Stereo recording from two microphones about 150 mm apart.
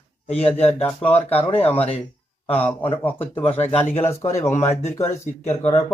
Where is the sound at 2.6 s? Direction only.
10° left (ahead or behind).